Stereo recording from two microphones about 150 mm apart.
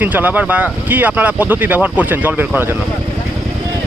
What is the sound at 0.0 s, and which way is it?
Speech, 10° right (ahead or behind).